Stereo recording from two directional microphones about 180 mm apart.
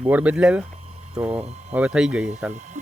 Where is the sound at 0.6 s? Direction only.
35° right (ahead or behind).